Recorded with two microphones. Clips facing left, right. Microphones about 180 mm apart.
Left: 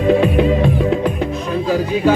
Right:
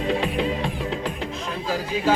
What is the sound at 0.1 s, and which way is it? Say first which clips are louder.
Music: left 11 dB; 55° left (ahead or behind).